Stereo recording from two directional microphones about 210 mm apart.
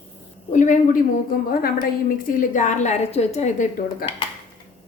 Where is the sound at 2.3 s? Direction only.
40° left (ahead or behind).